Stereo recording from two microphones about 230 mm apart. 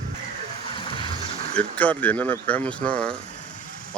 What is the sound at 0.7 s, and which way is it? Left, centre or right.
Vehicle, left.